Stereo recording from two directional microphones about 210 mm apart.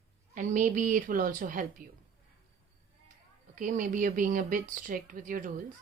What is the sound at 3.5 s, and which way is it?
Speech, 40° right (ahead or behind).